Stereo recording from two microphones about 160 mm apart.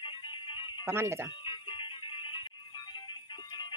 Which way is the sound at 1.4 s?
30° left (ahead or behind).